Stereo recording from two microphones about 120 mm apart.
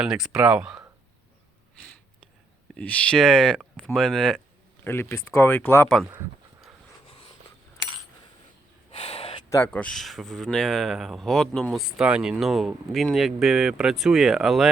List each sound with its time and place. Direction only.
0.0 s speech: 5° right (ahead or behind)
2.7 s speech: 10° left (ahead or behind)
4.8 s speech: 20° left (ahead or behind)
8.9 s gasp: 55° left (ahead or behind)
9.7 s speech: 5° left (ahead or behind)